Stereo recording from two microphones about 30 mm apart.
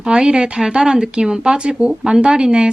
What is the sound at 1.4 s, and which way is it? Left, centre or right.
A woman's voice, right.